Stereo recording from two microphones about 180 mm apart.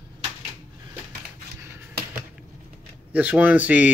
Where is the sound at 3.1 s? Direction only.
10° right (ahead or behind).